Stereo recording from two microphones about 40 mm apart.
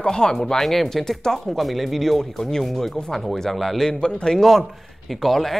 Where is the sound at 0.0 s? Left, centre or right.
Centre.